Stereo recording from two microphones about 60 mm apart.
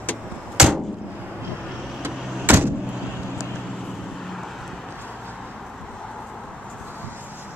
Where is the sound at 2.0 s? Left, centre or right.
Right.